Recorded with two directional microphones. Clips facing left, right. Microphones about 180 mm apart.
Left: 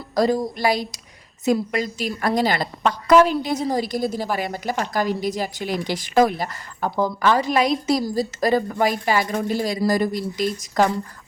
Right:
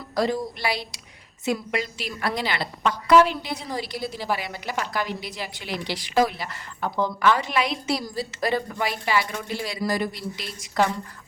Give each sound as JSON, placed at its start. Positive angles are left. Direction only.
{"t": 0.2, "sound": "a woman's voice", "side_deg": 40}